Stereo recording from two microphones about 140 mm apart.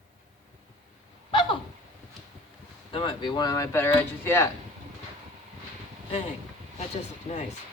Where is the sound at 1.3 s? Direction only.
35° left (ahead or behind).